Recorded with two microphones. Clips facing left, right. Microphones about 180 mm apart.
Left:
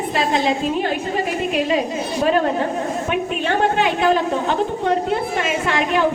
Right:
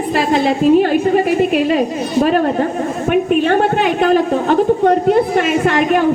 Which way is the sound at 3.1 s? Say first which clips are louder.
Right 11 dB; 55° right (ahead or behind).